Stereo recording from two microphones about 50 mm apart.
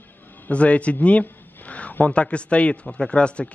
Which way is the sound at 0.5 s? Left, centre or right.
Left.